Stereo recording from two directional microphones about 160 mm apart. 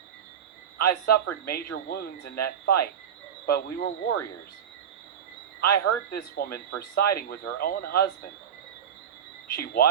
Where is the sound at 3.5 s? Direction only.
70° left (ahead or behind).